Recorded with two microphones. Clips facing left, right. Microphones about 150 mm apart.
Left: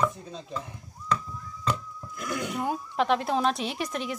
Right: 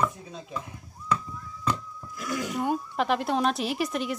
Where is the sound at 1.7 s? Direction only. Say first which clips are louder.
Even; centre (ahead or behind).